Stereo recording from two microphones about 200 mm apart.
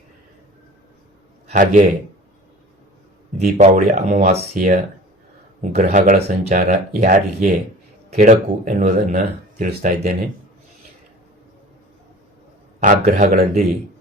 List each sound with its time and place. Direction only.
1.5 s speech: 40° right (ahead or behind)
3.3 s speech: 35° right (ahead or behind)
12.8 s speech: 40° right (ahead or behind)